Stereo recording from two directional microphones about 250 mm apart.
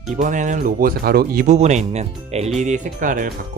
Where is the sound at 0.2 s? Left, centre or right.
Right.